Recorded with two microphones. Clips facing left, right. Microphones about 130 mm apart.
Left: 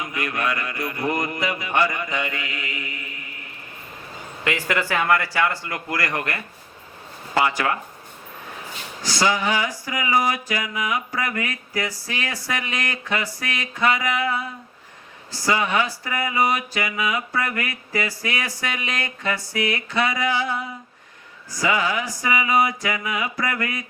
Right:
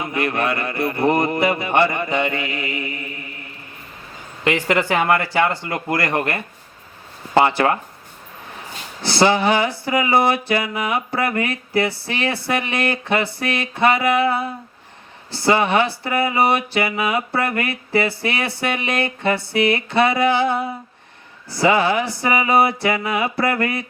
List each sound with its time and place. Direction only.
0.0 s speech: 30° right (ahead or behind)
4.4 s speech: 25° right (ahead or behind)
9.0 s speech: 30° right (ahead or behind)